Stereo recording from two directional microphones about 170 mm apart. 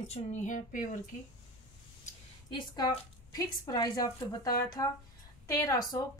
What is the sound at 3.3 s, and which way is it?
A woman's voice, 25° left (ahead or behind).